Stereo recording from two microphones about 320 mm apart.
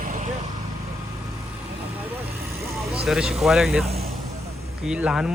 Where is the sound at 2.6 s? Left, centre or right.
Centre.